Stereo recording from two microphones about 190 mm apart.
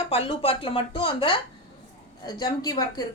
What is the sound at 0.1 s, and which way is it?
A woman's voice, 30° left (ahead or behind).